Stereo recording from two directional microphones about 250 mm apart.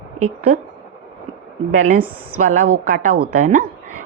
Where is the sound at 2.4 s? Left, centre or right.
Right.